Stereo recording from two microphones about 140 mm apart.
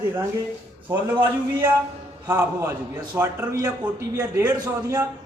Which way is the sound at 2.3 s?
20° right (ahead or behind).